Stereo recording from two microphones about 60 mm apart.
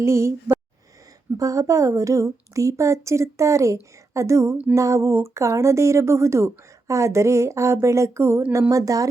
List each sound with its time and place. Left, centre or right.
0.0 s speech: right
1.4 s speech: right
8.7 s speech: right